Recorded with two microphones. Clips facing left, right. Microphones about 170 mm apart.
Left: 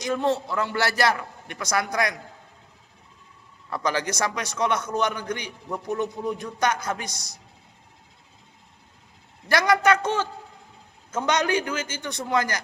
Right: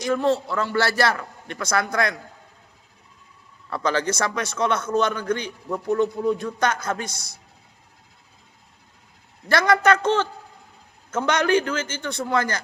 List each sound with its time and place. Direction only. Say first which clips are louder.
0.0 s a man's voice: right 3 dB; 20° left (ahead or behind)
3.7 s a man's voice: right 3 dB; 15° left (ahead or behind)
9.5 s a man's voice: right 2 dB; 15° left (ahead or behind)